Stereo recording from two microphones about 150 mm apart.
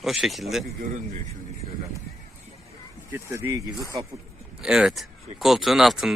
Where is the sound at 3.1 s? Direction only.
15° right (ahead or behind).